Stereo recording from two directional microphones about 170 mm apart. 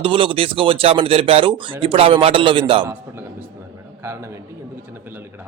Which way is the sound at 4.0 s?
15° right (ahead or behind).